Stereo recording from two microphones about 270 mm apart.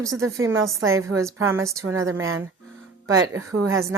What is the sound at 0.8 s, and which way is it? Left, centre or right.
Speech, right.